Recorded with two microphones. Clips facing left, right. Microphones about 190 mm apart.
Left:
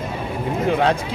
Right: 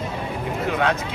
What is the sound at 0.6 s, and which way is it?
Speech, 30° left (ahead or behind).